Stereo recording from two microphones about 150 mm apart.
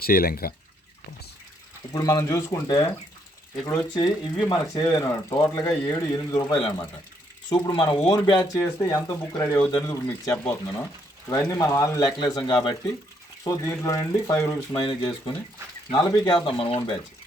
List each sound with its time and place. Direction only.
0.0 s speech: 80° left
1.9 s speech: 25° left (ahead or behind)
3.9 s speech: 30° left (ahead or behind)
7.5 s speech: 30° left (ahead or behind)
10.3 s speech: 10° left (ahead or behind)
11.3 s speech: 20° left (ahead or behind)
14.8 s speech: 30° left (ahead or behind)